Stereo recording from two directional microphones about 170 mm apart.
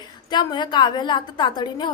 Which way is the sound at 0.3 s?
25° left (ahead or behind).